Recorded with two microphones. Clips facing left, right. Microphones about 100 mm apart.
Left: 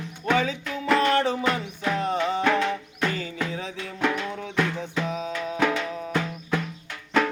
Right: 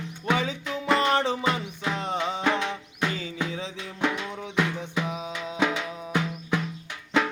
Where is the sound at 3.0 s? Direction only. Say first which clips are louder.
Left 2 dB; 50° left (ahead or behind).